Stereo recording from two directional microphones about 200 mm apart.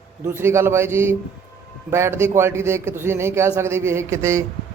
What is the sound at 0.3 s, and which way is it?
A man's voice, 10° right (ahead or behind).